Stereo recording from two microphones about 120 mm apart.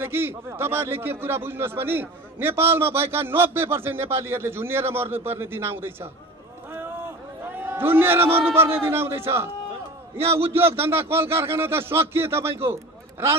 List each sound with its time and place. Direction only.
0.0 s a man's voice: 20° right (ahead or behind)
7.5 s a man's voice: 15° right (ahead or behind)